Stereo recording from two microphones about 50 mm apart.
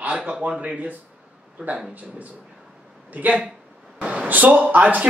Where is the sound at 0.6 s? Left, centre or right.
Right.